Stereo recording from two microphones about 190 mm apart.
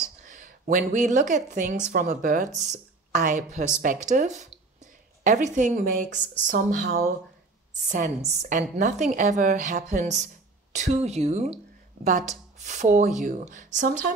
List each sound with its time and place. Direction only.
0.2 s a woman's voice: 40° right (ahead or behind)